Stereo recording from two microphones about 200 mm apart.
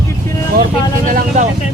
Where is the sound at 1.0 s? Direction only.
40° right (ahead or behind).